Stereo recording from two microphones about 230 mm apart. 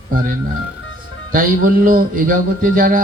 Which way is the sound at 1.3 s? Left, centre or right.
Right.